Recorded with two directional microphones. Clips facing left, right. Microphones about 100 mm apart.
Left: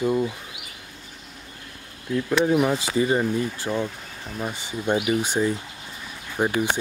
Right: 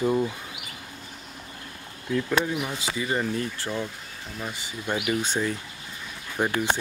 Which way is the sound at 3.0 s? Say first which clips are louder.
Left 1 dB; 20° left (ahead or behind).